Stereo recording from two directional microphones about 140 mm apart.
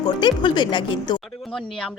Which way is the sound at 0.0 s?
30° left (ahead or behind).